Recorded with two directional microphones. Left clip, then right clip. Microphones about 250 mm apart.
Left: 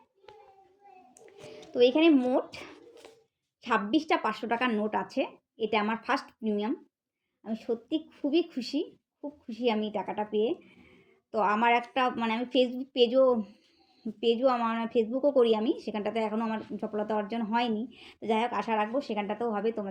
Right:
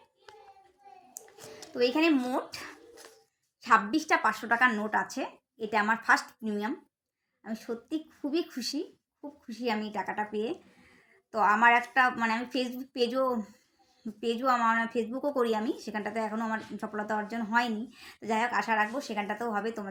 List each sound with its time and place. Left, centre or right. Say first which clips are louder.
1.7 s a woman's voice: left 4 dB; centre